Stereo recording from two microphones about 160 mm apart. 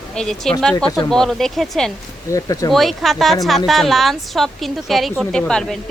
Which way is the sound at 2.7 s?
Centre (ahead or behind).